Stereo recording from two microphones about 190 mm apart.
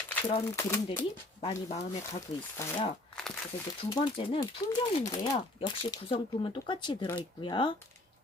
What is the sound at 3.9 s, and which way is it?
Speech, 25° left (ahead or behind).